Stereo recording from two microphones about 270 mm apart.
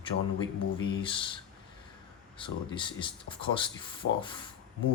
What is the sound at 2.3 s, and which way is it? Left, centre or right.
A man's voice, centre.